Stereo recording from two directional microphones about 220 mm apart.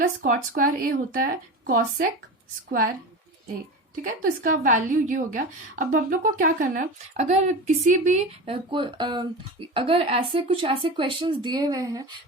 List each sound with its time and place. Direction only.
0.0 s speech: 35° right (ahead or behind)
4.2 s speech: 40° right (ahead or behind); by 12.0 s 15° right (ahead or behind)